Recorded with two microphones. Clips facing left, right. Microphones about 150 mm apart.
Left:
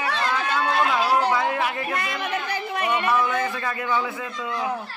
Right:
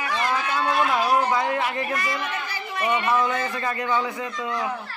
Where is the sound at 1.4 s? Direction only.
Centre (ahead or behind).